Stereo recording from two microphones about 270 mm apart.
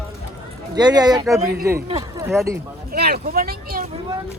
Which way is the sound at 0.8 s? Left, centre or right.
Centre.